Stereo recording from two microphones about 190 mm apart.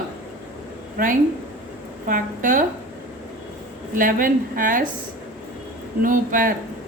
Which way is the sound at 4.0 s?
45° right (ahead or behind).